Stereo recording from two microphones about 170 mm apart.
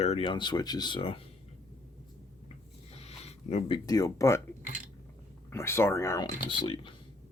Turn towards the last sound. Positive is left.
turn(degrees=30)  # may be behind; listen again after turning